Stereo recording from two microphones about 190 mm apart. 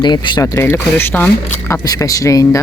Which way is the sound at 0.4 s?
15° left (ahead or behind).